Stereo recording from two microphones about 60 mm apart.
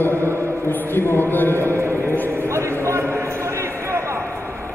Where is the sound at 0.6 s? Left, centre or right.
Left.